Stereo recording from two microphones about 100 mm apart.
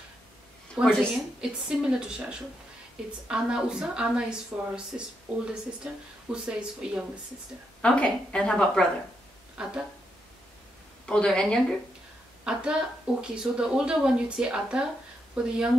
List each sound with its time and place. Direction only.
0.8 s a woman's voice: 10° right (ahead or behind)
7.8 s a woman's voice: 10° left (ahead or behind)
9.6 s a woman's voice: 10° right (ahead or behind)
11.1 s a woman's voice: 10° left (ahead or behind)
12.4 s a woman's voice: 10° right (ahead or behind)